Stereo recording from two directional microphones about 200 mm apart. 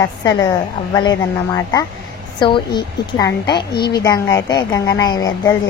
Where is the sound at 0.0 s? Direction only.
20° left (ahead or behind).